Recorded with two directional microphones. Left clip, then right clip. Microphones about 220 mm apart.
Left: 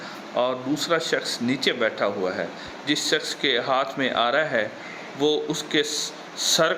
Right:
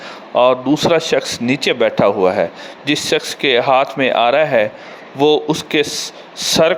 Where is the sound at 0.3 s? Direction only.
25° right (ahead or behind).